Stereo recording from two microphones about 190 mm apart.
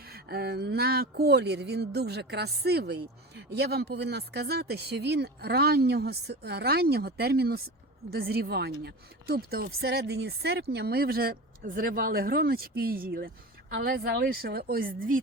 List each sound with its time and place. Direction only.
0.0 s a woman's voice: 55° right (ahead or behind)